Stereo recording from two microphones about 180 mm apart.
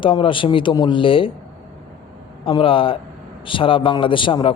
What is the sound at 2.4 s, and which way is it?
A man's voice, 30° left (ahead or behind).